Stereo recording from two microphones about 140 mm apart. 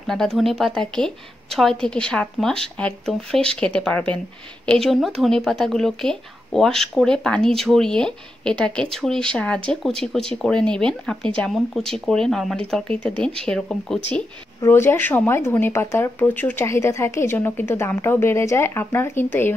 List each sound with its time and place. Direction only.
0.0 s speech: 5° left (ahead or behind)
14.6 s speech: 15° left (ahead or behind)